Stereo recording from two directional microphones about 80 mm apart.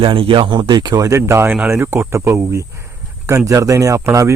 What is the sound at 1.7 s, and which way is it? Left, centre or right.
Speech, right.